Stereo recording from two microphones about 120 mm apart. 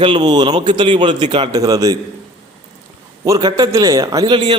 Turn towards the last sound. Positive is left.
turn(degrees=-40)  # may be behind; listen again after turning